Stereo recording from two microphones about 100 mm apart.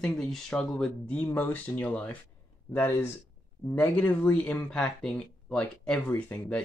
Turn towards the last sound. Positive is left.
turn(degrees=20)  # may be behind; listen again after turning